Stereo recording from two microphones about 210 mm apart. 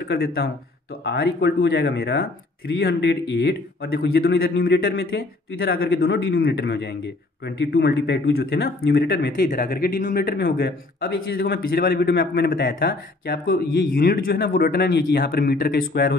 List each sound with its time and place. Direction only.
0.1 s speech: 50° left (ahead or behind)